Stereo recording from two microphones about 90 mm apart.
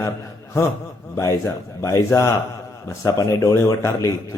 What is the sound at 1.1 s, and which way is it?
A man's voice, 30° left (ahead or behind).